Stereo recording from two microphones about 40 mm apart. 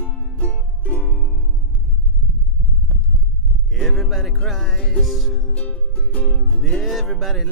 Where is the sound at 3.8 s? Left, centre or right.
Centre.